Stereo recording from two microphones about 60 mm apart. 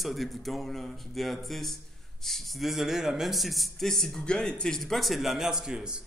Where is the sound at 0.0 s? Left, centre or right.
Centre.